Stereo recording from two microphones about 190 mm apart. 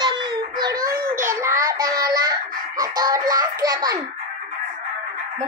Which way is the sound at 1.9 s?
20° right (ahead or behind).